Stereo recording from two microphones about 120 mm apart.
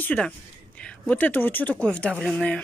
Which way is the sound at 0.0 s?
10° left (ahead or behind).